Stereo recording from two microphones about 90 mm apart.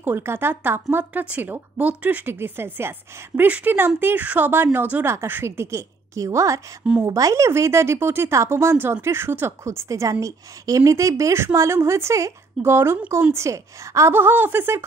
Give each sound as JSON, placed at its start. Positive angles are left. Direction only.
{"t": 0.0, "sound": "a woman's voice", "side_deg": -25}
{"t": 5.0, "sound": "a woman's voice", "side_deg": -30}
{"t": 6.8, "sound": "speech", "side_deg": -15}
{"t": 7.1, "sound": "a woman's voice", "side_deg": -40}